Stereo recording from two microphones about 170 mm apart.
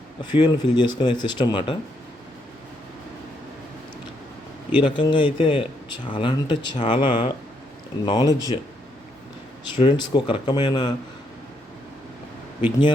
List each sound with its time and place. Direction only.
0.2 s speech: 25° left (ahead or behind)
4.7 s speech: 30° left (ahead or behind)
6.7 s speech: 40° left (ahead or behind)
7.0 s speech: 30° left (ahead or behind)
9.7 s speech: 25° left (ahead or behind)